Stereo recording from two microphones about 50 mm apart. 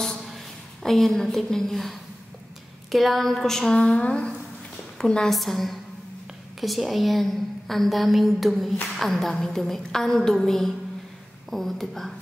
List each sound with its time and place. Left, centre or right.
0.8 s a woman's voice: centre
3.7 s a woman's voice: left
5.3 s a woman's voice: centre